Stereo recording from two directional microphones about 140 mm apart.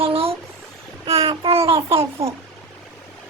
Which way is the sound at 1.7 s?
40° right (ahead or behind).